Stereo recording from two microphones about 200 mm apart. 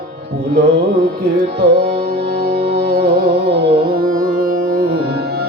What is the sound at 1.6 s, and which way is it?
Music, 50° right (ahead or behind).